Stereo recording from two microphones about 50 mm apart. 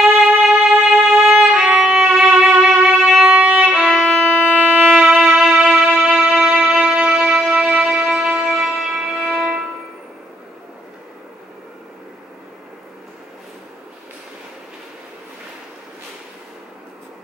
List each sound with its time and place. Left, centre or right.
0.2 s violin: centre
3.3 s violin: right
3.7 s violin: centre
4.4 s music: right
7.8 s music: centre